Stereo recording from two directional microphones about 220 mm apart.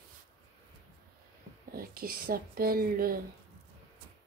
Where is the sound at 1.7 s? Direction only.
40° right (ahead or behind).